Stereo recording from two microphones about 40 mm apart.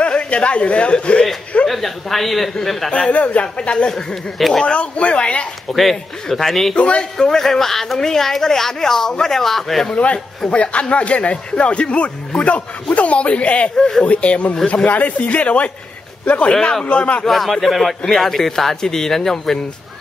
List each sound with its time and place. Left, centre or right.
0.0 s speech: left
1.7 s speech: centre
2.9 s speech: left
3.5 s speech: left
3.9 s speech: centre
4.6 s speech: left
5.7 s speech: centre
6.7 s speech: left
7.2 s speech: centre
10.5 s speech: left
13.7 s speech: centre
14.0 s speech: left
17.3 s speech: centre